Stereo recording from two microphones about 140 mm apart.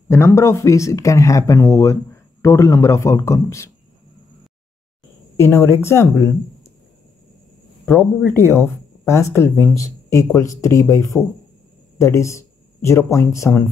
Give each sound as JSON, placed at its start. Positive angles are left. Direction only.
{"t": 0.1, "sound": "speech", "side_deg": 20}
{"t": 5.4, "sound": "speech", "side_deg": 15}
{"t": 7.8, "sound": "speech", "side_deg": 10}